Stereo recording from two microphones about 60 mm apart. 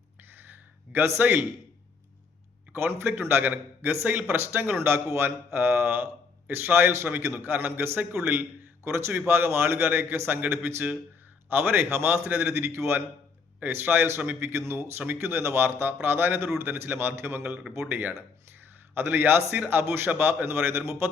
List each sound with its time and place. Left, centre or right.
0.9 s a man's voice: right
2.7 s a man's voice: right
8.8 s a man's voice: right
9.1 s a man's voice: right
13.6 s a man's voice: right